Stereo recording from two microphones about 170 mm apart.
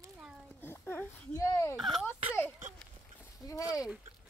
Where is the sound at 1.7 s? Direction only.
Centre (ahead or behind).